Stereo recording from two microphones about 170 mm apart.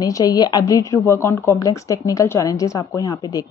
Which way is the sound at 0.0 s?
20° left (ahead or behind).